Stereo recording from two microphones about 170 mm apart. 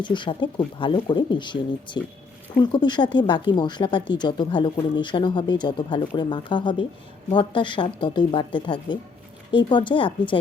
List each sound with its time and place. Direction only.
0.0 s speech: 30° left (ahead or behind)